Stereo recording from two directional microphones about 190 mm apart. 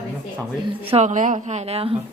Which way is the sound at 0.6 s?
30° right (ahead or behind).